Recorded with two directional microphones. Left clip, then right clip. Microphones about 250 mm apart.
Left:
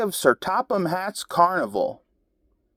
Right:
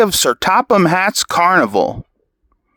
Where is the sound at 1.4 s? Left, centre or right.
Right.